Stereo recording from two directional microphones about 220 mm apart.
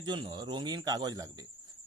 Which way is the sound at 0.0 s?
20° right (ahead or behind).